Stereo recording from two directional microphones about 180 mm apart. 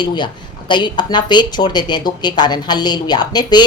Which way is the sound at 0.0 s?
25° left (ahead or behind).